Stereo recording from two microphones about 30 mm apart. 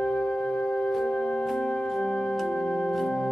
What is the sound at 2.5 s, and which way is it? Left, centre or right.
Organ, left.